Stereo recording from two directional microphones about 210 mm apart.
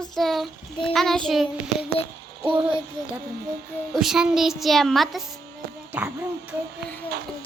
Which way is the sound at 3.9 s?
5° right (ahead or behind).